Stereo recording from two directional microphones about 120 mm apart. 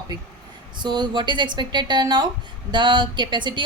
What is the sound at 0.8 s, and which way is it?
A woman's voice, 40° right (ahead or behind).